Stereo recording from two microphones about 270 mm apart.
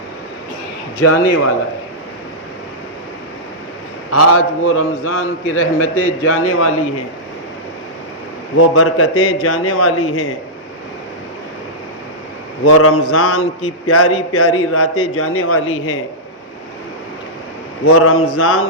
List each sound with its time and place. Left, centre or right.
4.1 s a man's voice: left
8.5 s a man's voice: left
12.6 s a man's voice: left
17.8 s a man's voice: left